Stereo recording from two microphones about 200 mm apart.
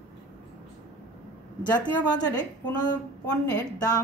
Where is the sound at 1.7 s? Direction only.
20° left (ahead or behind).